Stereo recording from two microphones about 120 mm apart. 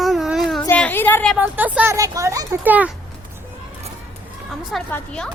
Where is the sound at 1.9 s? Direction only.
30° right (ahead or behind).